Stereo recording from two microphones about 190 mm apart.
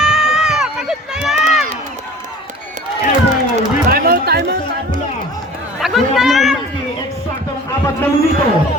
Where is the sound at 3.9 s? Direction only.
55° right (ahead or behind).